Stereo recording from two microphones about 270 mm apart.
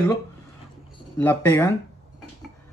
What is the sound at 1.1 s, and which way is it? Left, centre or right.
Speech, centre.